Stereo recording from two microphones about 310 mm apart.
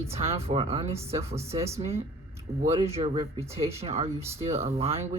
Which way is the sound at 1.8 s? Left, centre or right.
Centre.